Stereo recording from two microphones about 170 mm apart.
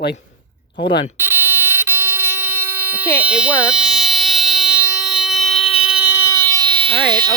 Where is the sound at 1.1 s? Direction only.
10° right (ahead or behind).